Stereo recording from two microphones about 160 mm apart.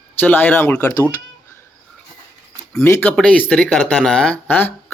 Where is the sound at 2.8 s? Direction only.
15° left (ahead or behind).